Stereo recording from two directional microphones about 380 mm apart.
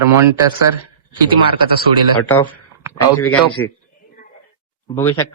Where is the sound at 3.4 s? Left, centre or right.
Left.